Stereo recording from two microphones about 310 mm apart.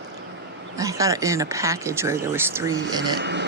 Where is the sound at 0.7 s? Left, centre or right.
Centre.